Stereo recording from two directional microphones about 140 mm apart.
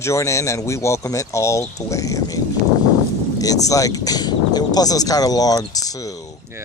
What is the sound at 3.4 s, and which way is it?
A man's voice, 25° left (ahead or behind).